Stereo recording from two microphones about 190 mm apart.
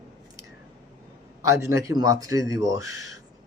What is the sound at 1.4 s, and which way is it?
A man's voice, 15° right (ahead or behind).